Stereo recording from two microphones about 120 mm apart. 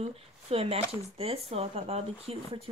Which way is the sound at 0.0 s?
55° right (ahead or behind).